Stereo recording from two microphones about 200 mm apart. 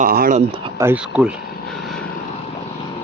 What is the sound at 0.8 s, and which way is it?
Speech, 10° right (ahead or behind).